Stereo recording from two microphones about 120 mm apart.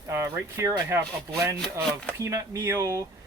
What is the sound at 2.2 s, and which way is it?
Speech, 25° right (ahead or behind).